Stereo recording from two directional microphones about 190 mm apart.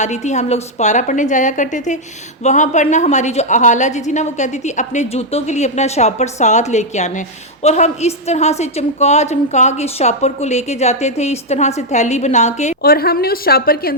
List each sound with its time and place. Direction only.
0.0 s a woman's voice: 40° left (ahead or behind)
12.8 s a woman's voice: 55° left (ahead or behind)